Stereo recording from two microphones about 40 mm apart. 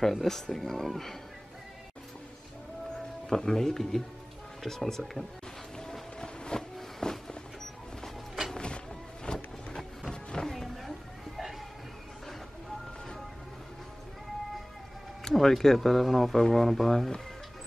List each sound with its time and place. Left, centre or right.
0.0 s speech: centre
3.3 s speech: centre
6.1 s a sound: left
8.5 s music: left
9.8 s music: centre
15.4 s speech: centre